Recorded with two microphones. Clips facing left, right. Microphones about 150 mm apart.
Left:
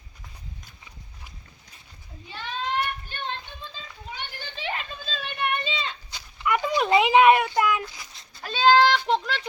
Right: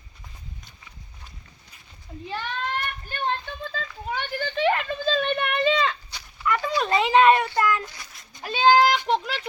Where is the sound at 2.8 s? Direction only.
55° right (ahead or behind).